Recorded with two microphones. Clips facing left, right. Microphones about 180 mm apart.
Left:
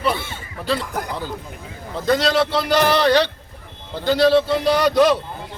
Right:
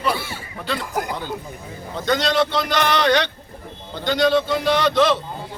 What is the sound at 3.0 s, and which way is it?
Speech, 30° left (ahead or behind).